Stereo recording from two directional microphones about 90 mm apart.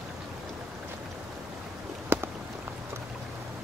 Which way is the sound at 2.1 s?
25° right (ahead or behind).